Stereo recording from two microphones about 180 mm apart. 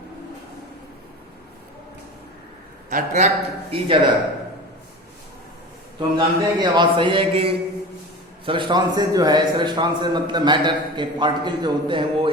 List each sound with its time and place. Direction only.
2.9 s a man's voice: 40° right (ahead or behind)
3.7 s a man's voice: 30° right (ahead or behind)
6.0 s a man's voice: 25° right (ahead or behind)